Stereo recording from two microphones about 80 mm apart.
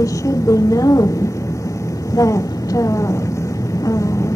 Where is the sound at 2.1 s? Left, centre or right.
Left.